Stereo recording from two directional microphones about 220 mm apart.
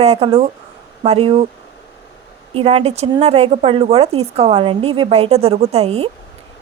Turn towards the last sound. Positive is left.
turn(degrees=-25)  # may be behind; listen again after turning